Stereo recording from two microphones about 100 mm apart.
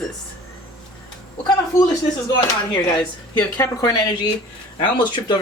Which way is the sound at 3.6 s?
35° left (ahead or behind).